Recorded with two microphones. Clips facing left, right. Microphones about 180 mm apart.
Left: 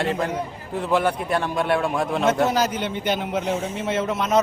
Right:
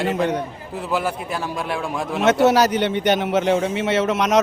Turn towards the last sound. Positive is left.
turn(degrees=-80)